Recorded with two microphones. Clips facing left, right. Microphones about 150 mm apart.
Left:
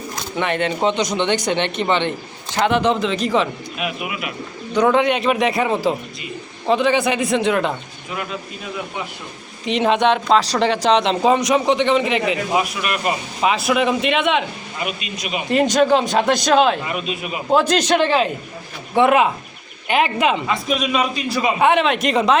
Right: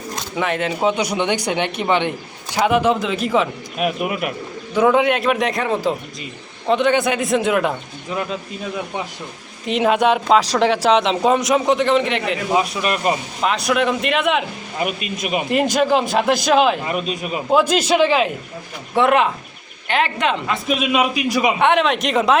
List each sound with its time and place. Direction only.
0.3 s speech: centre (ahead or behind)
3.8 s speech: 45° right (ahead or behind)
4.7 s speech: 5° right (ahead or behind)
9.6 s speech: 5° right (ahead or behind)
12.8 s a man's voice: 35° right (ahead or behind)
13.4 s speech: 5° left (ahead or behind)
14.8 s speech: 50° right (ahead or behind)
15.4 s speech: 5° right (ahead or behind)
16.9 s a man's voice: 40° right (ahead or behind)
17.5 s speech: 5° right (ahead or behind)
21.6 s speech: centre (ahead or behind)